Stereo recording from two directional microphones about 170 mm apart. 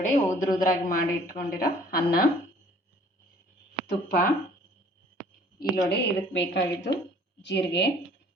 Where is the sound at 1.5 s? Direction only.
60° left (ahead or behind).